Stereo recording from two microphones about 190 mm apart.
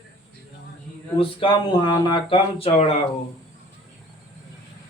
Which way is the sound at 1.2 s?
25° left (ahead or behind).